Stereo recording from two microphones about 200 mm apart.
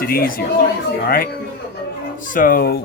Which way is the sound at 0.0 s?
45° left (ahead or behind).